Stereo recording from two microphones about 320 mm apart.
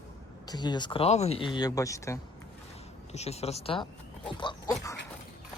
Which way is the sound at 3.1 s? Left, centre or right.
Centre.